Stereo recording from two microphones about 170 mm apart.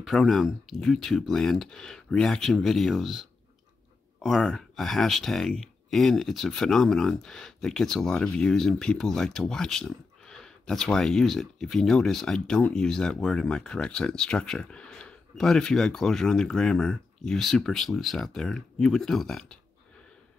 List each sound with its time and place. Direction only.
0.0 s speech: centre (ahead or behind)